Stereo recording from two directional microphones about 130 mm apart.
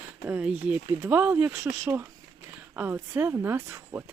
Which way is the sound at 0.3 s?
10° right (ahead or behind).